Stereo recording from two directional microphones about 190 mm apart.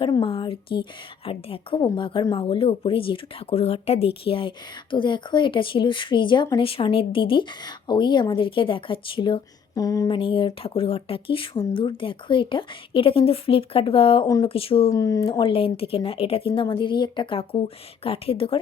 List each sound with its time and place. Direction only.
0.0 s a woman's voice: 25° left (ahead or behind)
14.9 s a woman's voice: 20° left (ahead or behind)